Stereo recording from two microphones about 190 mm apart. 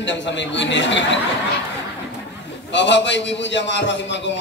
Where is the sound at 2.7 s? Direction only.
70° left (ahead or behind).